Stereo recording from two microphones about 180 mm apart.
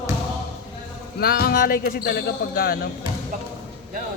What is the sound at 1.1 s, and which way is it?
Speech, 60° left (ahead or behind).